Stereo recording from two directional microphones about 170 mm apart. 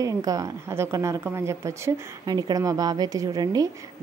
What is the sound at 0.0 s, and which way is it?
A woman's voice, 20° right (ahead or behind).